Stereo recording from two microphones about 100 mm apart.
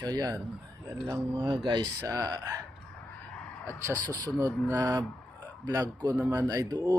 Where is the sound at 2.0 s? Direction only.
35° right (ahead or behind).